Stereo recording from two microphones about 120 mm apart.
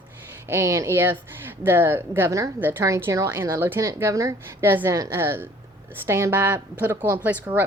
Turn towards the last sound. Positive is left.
turn(degrees=-15)  # may be behind; listen again after turning